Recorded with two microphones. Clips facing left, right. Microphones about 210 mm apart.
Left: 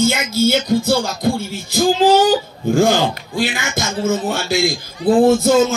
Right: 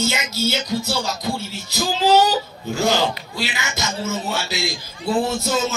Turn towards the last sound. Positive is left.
turn(degrees=50)  # may be behind; listen again after turning